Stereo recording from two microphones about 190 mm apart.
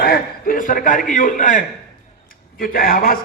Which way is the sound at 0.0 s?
50° left (ahead or behind).